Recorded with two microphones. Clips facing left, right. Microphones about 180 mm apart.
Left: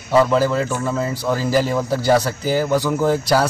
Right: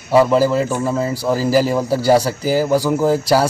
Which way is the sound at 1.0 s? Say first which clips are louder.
Right 3 dB; 35° right (ahead or behind).